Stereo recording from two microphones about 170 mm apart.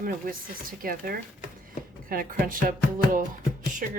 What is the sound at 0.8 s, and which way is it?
A woman's voice, 60° right (ahead or behind).